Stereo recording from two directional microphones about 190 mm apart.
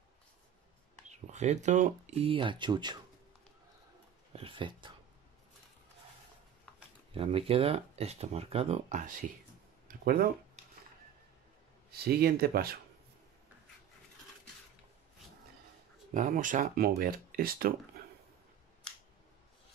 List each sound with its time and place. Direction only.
1.0 s speech: 35° right (ahead or behind)
4.3 s speech: 30° right (ahead or behind)
7.2 s speech: 30° right (ahead or behind)
9.8 s a sound: 50° right (ahead or behind)
12.0 s speech: 55° right (ahead or behind)
16.1 s speech: 45° right (ahead or behind)